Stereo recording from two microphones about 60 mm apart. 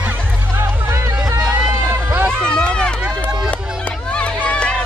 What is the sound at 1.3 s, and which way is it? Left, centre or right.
Music, right.